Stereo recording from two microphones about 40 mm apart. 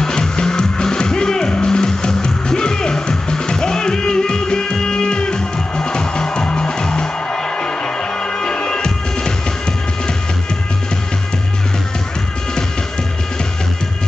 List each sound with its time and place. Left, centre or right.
0.0 s music: centre
8.4 s music: left